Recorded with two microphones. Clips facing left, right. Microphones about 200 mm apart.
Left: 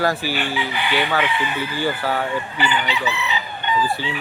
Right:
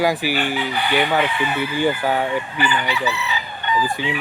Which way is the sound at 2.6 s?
20° left (ahead or behind).